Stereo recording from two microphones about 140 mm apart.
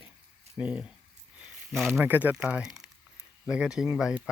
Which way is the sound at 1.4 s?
Centre (ahead or behind).